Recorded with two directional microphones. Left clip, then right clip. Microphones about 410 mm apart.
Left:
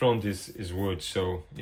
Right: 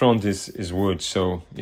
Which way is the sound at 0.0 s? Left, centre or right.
Centre.